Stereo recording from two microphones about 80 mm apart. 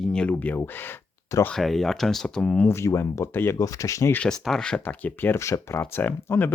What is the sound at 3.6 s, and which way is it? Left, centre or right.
Speech, left.